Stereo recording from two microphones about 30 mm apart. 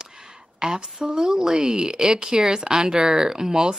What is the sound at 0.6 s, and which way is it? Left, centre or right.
Speech, right.